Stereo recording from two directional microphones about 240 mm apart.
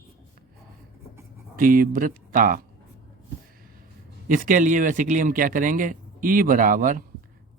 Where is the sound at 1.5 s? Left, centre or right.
Right.